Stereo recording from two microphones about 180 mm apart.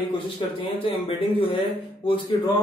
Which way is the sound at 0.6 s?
30° left (ahead or behind).